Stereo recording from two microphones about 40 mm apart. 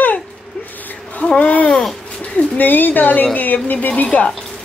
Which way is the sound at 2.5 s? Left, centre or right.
Left.